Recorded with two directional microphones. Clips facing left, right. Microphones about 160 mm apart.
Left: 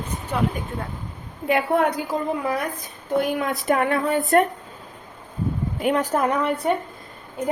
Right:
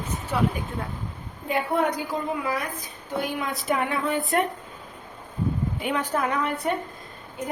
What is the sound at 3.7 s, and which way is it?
Speech, 50° left (ahead or behind).